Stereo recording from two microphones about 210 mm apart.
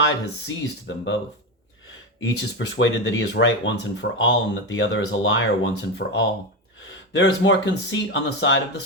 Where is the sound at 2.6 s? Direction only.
60° left (ahead or behind).